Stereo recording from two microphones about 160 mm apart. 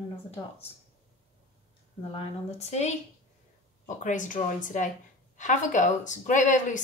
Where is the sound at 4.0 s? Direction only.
50° left (ahead or behind).